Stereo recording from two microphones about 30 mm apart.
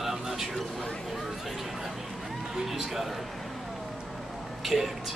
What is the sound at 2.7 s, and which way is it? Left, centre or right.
Speech, centre.